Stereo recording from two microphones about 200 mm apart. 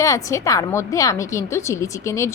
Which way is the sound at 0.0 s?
15° left (ahead or behind).